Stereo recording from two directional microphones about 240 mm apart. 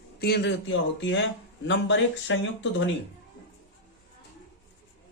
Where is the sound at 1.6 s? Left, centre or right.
Left.